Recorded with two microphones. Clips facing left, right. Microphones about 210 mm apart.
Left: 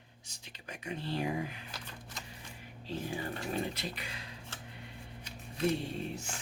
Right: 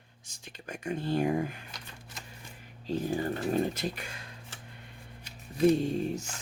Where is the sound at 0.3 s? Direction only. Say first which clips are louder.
Right 6 dB; 50° right (ahead or behind).